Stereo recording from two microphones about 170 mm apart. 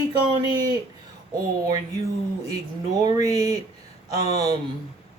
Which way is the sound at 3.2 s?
20° right (ahead or behind).